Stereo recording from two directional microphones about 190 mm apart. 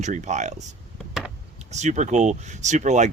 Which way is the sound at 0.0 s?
40° right (ahead or behind).